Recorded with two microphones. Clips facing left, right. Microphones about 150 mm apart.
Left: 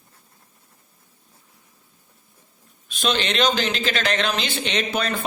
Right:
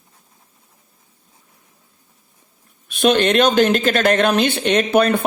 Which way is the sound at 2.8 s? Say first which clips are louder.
Right 9 dB; 60° right (ahead or behind).